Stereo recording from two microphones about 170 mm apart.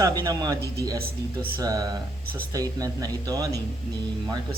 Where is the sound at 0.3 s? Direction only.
20° right (ahead or behind).